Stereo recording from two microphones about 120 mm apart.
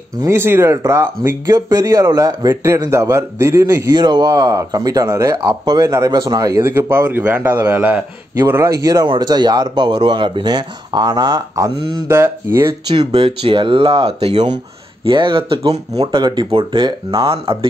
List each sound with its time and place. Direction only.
0.2 s speech: 20° right (ahead or behind)
3.9 s speech: 35° right (ahead or behind)
6.6 s a man's voice: 20° right (ahead or behind)
8.8 s speech: 30° right (ahead or behind)
11.7 s speech: 45° right (ahead or behind)
12.1 s speech: 20° right (ahead or behind)
13.1 s speech: 50° right (ahead or behind)